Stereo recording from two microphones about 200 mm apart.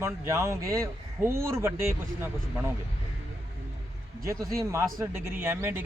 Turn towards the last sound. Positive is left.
turn(degrees=-10)  # may be behind; listen again after turning